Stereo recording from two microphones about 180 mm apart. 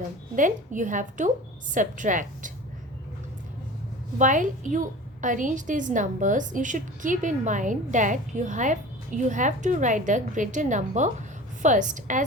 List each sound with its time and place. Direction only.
0.3 s a woman's voice: 45° right (ahead or behind)
4.2 s a woman's voice: 45° right (ahead or behind)